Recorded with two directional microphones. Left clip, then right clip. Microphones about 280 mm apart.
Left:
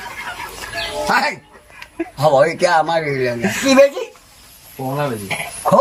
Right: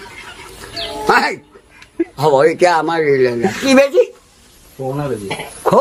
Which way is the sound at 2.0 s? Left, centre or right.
Centre.